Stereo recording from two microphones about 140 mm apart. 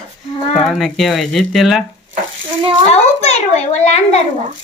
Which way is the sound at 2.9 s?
50° left (ahead or behind).